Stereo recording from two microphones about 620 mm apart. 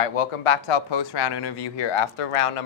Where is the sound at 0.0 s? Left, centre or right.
Left.